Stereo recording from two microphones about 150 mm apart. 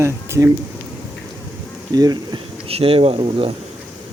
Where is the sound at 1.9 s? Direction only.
25° right (ahead or behind).